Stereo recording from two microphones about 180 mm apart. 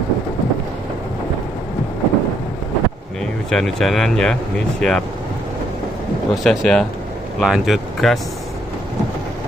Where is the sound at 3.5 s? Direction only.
5° left (ahead or behind).